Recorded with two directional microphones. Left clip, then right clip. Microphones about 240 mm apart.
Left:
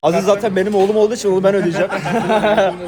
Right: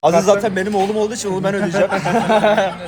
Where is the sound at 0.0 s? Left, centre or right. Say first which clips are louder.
Right 1 dB; centre; by 1.7 s left.